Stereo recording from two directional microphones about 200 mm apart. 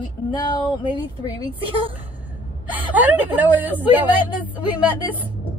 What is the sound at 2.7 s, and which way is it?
A woman's voice, 10° right (ahead or behind).